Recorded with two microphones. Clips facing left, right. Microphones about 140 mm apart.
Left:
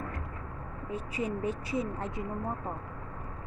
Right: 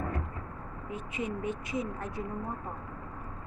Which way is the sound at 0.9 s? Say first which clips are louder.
Left 2 dB; 35° left (ahead or behind).